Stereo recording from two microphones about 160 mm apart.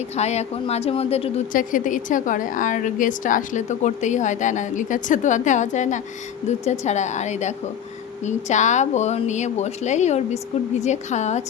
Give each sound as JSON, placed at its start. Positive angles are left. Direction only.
{"t": 0.2, "sound": "a woman's voice", "side_deg": 45}
{"t": 1.5, "sound": "a woman's voice", "side_deg": 55}